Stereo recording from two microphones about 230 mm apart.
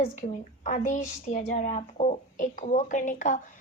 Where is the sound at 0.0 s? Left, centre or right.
Left.